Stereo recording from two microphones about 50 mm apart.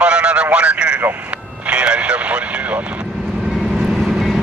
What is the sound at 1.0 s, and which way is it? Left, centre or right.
Vehicle, right.